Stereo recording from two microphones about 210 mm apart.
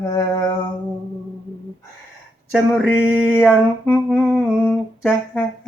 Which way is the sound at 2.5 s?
5° right (ahead or behind).